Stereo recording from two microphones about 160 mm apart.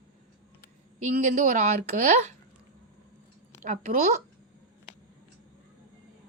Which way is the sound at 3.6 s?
50° right (ahead or behind).